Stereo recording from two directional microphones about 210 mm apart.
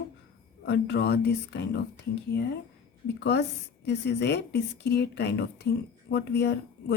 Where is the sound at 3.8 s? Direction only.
50° left (ahead or behind).